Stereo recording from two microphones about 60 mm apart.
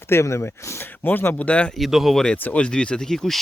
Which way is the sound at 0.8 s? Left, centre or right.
Left.